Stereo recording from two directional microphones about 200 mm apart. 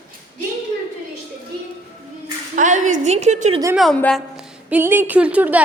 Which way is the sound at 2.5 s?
40° right (ahead or behind).